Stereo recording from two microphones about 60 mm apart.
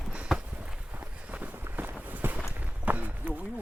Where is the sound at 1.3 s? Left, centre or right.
Right.